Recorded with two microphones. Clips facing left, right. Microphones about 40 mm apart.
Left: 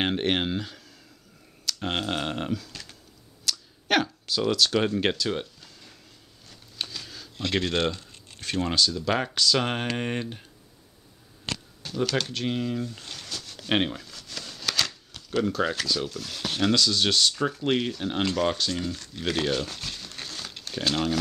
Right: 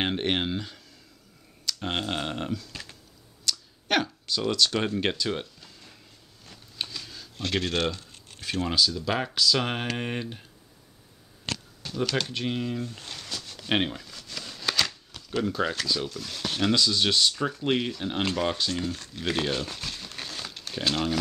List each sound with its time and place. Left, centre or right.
0.0 s speech: centre
2.7 s typing: centre
3.4 s speech: centre
6.5 s a sound: centre
7.0 s computer keyboard: centre
7.3 s speech: left
7.6 s speech: centre
11.8 s a sound: centre
16.7 s speech: centre
19.1 s crumpling: centre
20.6 s speech: centre